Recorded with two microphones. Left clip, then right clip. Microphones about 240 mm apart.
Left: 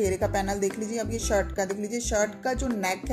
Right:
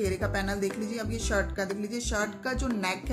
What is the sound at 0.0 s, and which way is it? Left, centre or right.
Speech, centre.